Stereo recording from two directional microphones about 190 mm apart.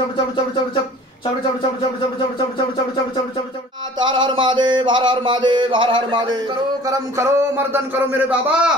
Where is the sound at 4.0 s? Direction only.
25° right (ahead or behind); by 8.7 s 5° right (ahead or behind).